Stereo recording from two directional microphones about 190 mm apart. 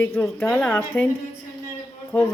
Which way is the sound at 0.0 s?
10° left (ahead or behind).